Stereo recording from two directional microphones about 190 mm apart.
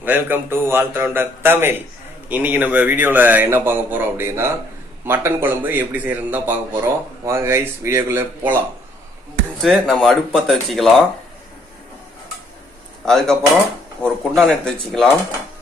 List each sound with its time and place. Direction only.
0.0 s a man's voice: 10° right (ahead or behind)
9.6 s speech: centre (ahead or behind)
13.0 s speech: 5° left (ahead or behind)